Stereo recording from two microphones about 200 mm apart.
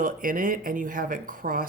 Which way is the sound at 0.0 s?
45° right (ahead or behind).